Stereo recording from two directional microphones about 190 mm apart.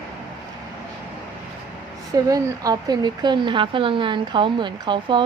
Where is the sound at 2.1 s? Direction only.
20° right (ahead or behind).